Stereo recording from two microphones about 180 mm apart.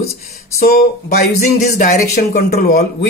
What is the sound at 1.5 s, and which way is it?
Speech, 40° left (ahead or behind).